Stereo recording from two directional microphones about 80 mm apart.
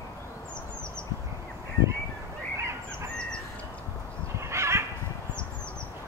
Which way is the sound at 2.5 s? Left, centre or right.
Right.